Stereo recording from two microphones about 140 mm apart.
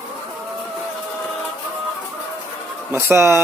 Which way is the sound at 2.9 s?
20° right (ahead or behind).